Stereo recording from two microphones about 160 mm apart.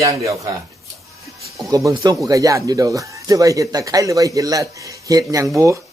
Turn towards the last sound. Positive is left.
turn(degrees=-20)  # may be behind; listen again after turning